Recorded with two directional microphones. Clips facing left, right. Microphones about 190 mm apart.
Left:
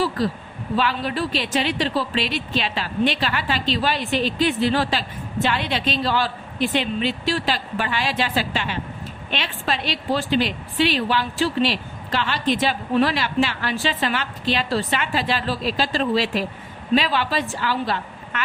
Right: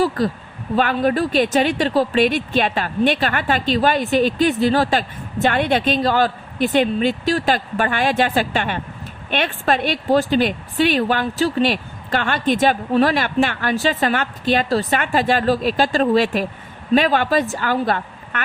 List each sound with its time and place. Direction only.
0.8 s a woman's voice: 50° right (ahead or behind)